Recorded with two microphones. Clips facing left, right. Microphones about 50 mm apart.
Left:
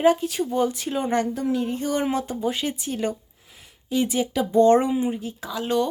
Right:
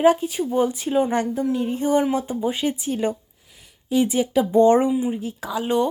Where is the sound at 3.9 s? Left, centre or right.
Right.